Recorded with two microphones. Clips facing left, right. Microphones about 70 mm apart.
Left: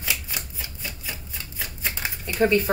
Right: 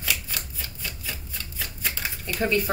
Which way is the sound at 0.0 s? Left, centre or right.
Centre.